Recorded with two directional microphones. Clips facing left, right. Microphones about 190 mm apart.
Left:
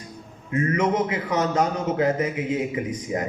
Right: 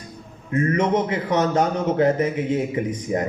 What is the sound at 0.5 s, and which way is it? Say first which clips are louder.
A man's voice: right 2 dB; 35° right (ahead or behind).